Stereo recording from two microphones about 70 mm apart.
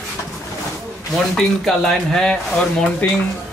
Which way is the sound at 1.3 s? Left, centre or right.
Centre.